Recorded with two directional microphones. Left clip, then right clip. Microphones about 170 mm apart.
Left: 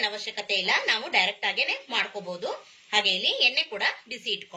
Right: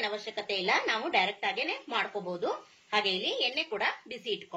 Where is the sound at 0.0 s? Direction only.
55° right (ahead or behind).